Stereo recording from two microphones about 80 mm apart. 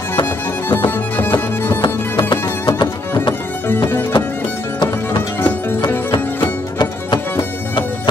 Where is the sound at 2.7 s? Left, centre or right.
Left.